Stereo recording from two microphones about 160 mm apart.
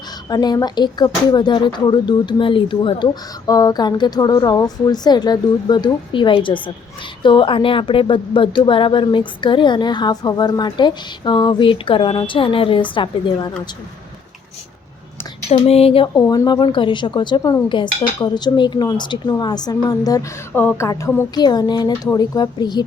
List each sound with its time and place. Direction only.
0.3 s speech: 25° left (ahead or behind)
15.4 s speech: 40° left (ahead or behind)
16.1 s speech: 25° left (ahead or behind)
20.6 s a sound: 15° left (ahead or behind)
21.3 s speech: 25° left (ahead or behind)